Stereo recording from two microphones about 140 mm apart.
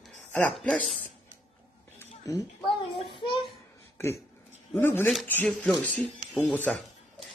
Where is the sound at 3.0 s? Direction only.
35° left (ahead or behind).